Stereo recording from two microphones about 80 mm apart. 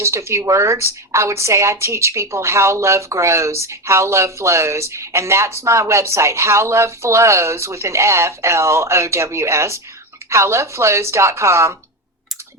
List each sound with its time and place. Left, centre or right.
0.0 s a woman's voice: right